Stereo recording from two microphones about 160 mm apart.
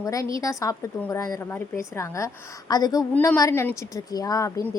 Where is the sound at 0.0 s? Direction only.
20° left (ahead or behind).